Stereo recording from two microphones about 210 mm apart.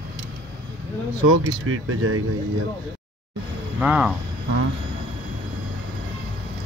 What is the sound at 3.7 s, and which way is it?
Speech, 5° right (ahead or behind).